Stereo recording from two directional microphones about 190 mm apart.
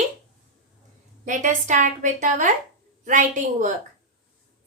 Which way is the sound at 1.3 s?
40° right (ahead or behind).